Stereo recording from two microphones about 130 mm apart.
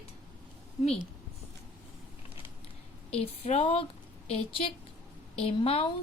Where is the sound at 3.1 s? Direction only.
50° left (ahead or behind).